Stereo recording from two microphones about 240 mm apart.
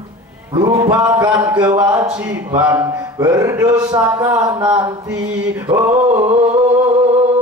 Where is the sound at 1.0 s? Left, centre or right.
Centre.